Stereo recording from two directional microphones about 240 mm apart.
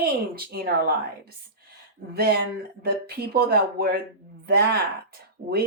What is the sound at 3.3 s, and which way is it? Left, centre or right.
Speech, right.